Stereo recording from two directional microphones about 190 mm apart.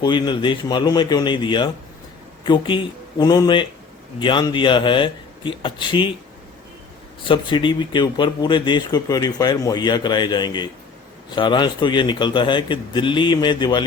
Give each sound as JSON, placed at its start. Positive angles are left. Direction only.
{"t": 0.0, "sound": "speech", "side_deg": 25}
{"t": 7.3, "sound": "speech", "side_deg": 25}